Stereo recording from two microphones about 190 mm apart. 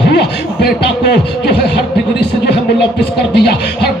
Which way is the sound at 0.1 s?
60° left (ahead or behind).